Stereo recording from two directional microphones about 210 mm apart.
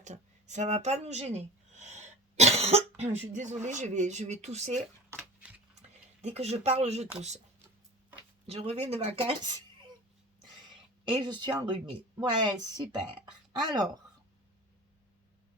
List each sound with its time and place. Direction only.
0.0 s speech: 35° right (ahead or behind)
5.1 s a sound: 10° right (ahead or behind)
6.2 s speech: 30° right (ahead or behind)
8.4 s speech: 30° right (ahead or behind)
10.4 s a sound: 20° right (ahead or behind)
12.2 s speech: 20° right (ahead or behind)